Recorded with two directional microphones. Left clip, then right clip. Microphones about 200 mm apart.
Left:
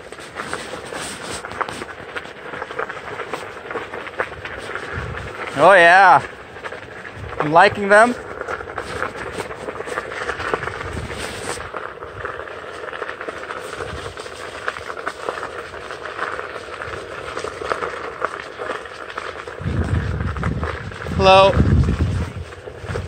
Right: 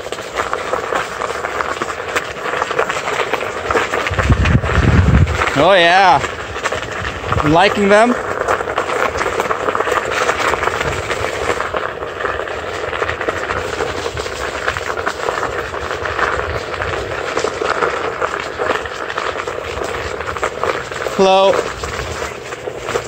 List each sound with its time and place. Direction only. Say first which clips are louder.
5.6 s speech: left 1 dB; 5° right (ahead or behind)
7.5 s speech: even; 5° right (ahead or behind)
17.4 s a sound: right 7 dB; 50° left (ahead or behind)
21.2 s speech: even; 25° right (ahead or behind)